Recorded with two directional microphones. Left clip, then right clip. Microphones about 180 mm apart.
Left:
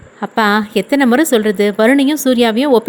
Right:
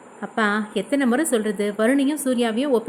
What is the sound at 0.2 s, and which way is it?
A woman's voice, 50° left (ahead or behind).